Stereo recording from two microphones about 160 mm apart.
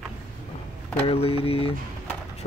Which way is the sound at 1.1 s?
35° left (ahead or behind).